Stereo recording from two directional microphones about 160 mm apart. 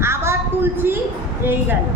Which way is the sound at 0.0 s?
15° right (ahead or behind).